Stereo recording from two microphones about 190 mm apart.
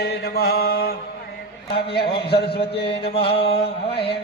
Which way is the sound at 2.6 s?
30° left (ahead or behind).